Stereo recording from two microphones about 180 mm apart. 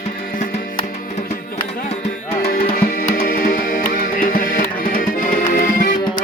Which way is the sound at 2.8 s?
55° left (ahead or behind).